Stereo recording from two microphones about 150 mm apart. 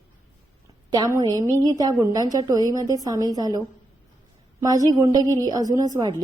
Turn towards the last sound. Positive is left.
turn(degrees=-25)  # may be behind; listen again after turning